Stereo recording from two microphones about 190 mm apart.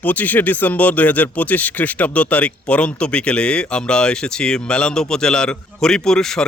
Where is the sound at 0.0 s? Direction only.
10° left (ahead or behind).